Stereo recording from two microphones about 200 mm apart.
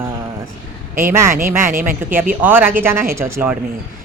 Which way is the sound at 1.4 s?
10° right (ahead or behind).